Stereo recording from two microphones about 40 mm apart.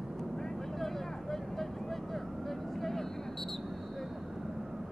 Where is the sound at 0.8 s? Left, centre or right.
Centre.